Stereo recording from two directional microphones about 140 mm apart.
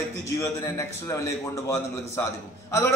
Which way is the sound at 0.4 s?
20° left (ahead or behind).